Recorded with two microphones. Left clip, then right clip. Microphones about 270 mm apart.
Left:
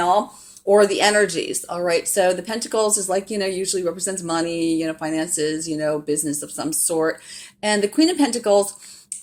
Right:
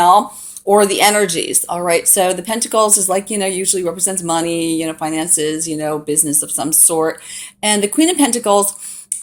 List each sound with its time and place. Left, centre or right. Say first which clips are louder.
0.0 s speech: right 8 dB; right